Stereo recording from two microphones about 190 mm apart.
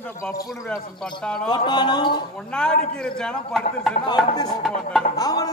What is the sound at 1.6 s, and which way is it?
Speech, 25° left (ahead or behind).